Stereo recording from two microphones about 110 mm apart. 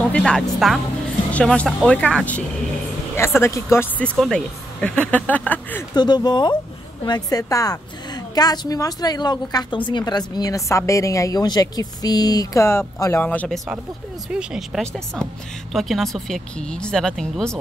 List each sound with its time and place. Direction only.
0.0 s speech: 5° left (ahead or behind)
3.2 s speech: 25° left (ahead or behind)
4.0 s speech: 10° left (ahead or behind)
5.9 s a woman's voice: 40° left (ahead or behind)
12.6 s speech: 25° left (ahead or behind)
14.3 s speech: 5° right (ahead or behind)